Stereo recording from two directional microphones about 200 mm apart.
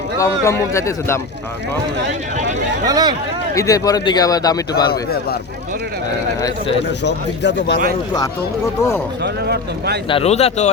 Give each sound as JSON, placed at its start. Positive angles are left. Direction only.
{"t": 0.2, "sound": "a man's voice", "side_deg": 15}
{"t": 2.8, "sound": "speech", "side_deg": -20}
{"t": 3.5, "sound": "a man's voice", "side_deg": 15}
{"t": 4.7, "sound": "a man's voice", "side_deg": 50}
{"t": 7.0, "sound": "speech", "side_deg": 60}
{"t": 9.2, "sound": "speech", "side_deg": -55}
{"t": 10.1, "sound": "speech", "side_deg": 30}